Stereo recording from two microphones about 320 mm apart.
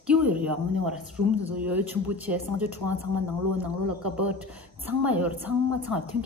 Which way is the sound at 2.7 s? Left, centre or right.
Right.